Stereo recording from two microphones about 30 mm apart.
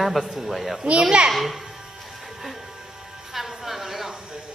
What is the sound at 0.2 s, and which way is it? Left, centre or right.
A child's voice, centre.